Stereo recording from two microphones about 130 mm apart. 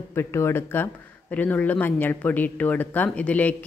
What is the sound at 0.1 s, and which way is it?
Speech, 20° left (ahead or behind).